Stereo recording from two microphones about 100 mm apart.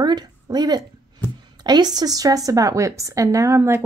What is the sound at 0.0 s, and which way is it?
Speech, 45° right (ahead or behind).